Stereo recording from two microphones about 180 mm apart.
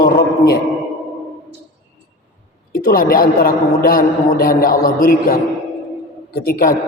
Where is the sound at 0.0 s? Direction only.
60° left (ahead or behind).